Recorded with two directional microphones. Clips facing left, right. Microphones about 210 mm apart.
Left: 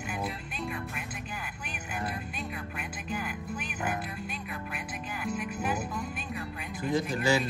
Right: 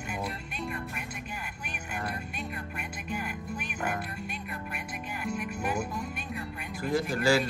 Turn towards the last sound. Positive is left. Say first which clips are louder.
# right 1 dB
turn(degrees=20)  # may be behind; listen again after turning